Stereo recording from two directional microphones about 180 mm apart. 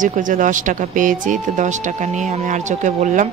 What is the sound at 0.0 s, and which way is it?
Speech, 45° right (ahead or behind).